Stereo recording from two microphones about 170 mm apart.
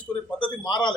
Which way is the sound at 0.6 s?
25° left (ahead or behind).